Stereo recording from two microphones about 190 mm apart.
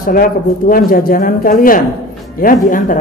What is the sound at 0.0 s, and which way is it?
A woman's voice, 50° left (ahead or behind).